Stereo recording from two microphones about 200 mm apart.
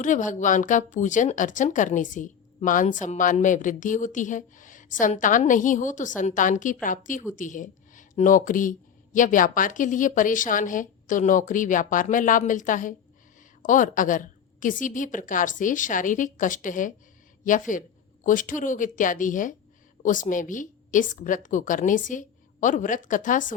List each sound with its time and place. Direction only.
0.0 s speech: 40° left (ahead or behind)